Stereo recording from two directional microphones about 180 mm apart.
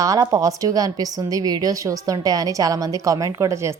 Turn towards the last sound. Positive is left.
turn(degrees=-15)  # may be behind; listen again after turning